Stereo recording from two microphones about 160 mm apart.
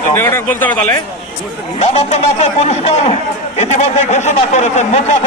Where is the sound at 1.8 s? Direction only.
40° left (ahead or behind).